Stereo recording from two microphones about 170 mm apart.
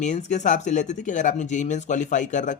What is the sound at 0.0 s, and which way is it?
Speech, 45° left (ahead or behind).